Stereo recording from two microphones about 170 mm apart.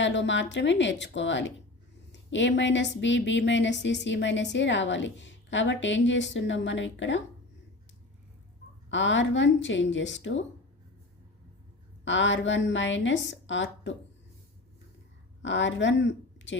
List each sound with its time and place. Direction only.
0.0 s speech: 90° left
8.9 s speech: 90° left
12.0 s speech: 90° left
15.4 s a woman's voice: 90° left